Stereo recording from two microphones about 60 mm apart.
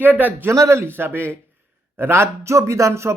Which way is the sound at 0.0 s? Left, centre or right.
Right.